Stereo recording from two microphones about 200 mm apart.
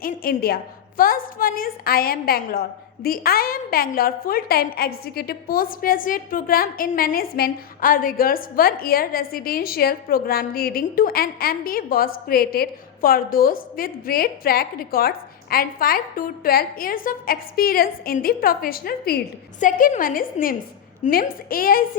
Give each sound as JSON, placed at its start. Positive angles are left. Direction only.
{"t": 0.0, "sound": "a woman's voice", "side_deg": 45}